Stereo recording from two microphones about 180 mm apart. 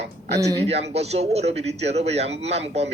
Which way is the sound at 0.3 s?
20° right (ahead or behind).